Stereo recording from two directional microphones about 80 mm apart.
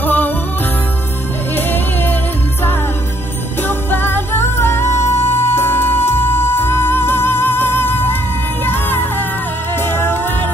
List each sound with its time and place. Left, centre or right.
0.0 s music: left
3.6 s music: left